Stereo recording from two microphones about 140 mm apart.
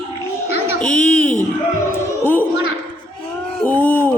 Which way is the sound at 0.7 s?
10° left (ahead or behind).